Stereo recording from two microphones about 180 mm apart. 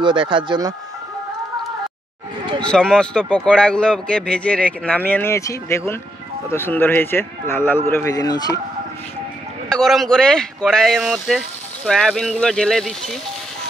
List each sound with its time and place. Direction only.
0.0 s speech: 25° right (ahead or behind)
2.6 s a man's voice: 5° left (ahead or behind); by 8.5 s 20° left (ahead or behind)
9.7 s speech: centre (ahead or behind)